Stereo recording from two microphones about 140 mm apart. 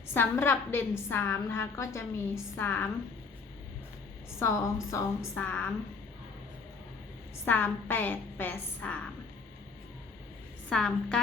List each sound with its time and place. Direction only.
0.1 s a woman's voice: 15° left (ahead or behind)
4.4 s a woman's voice: 20° left (ahead or behind)
7.4 s a woman's voice: 15° left (ahead or behind)
10.7 s a woman's voice: 5° left (ahead or behind)